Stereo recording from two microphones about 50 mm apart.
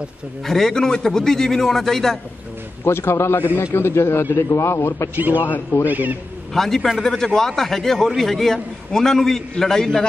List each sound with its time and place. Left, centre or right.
0.5 s a man's voice: centre
2.8 s a man's voice: left
3.3 s a man's voice: left
3.6 s a man's voice: left
5.1 s a man's voice: right
6.5 s a man's voice: centre